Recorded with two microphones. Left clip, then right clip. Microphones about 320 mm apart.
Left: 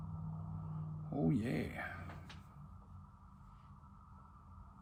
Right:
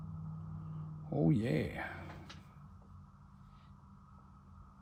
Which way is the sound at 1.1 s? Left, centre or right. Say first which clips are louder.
Right 4 dB; right.